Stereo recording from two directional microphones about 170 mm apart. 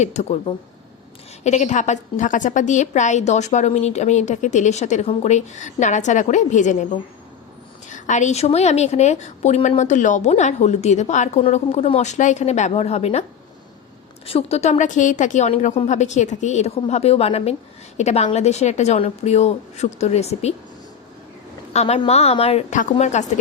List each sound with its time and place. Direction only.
0.0 s a woman's voice: 40° left (ahead or behind)
7.9 s a woman's voice: 45° left (ahead or behind)
14.3 s a woman's voice: 35° left (ahead or behind)
21.7 s a woman's voice: 40° left (ahead or behind)